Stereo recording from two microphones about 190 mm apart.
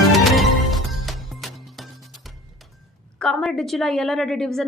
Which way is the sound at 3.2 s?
5° left (ahead or behind).